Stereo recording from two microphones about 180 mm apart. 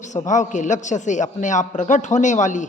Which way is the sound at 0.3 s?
45° left (ahead or behind).